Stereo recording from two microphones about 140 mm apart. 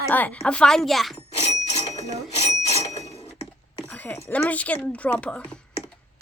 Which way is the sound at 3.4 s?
5° left (ahead or behind).